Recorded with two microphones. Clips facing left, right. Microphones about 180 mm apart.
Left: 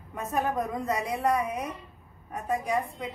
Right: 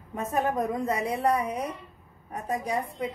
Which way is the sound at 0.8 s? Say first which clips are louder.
Even; 30° right (ahead or behind).